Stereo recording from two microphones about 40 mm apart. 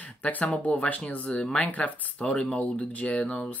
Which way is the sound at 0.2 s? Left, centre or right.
Left.